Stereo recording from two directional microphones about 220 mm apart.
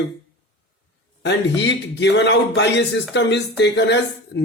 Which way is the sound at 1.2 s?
55° left (ahead or behind).